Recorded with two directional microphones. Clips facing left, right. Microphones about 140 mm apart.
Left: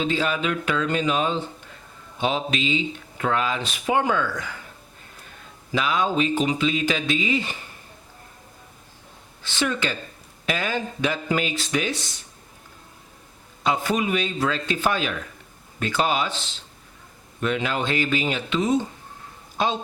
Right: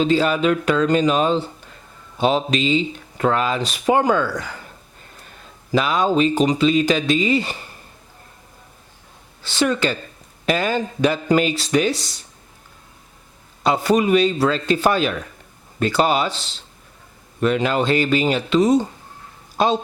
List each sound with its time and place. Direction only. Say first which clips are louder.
0.0 s speech: right 7 dB; 35° right (ahead or behind)
5.7 s speech: right 5 dB; 35° right (ahead or behind)
9.4 s speech: right 6 dB; 35° right (ahead or behind)
13.7 s speech: right 6 dB; 35° right (ahead or behind)